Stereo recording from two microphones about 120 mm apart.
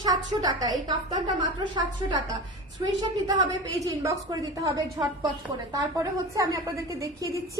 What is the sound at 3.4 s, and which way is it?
A woman's voice, 30° right (ahead or behind).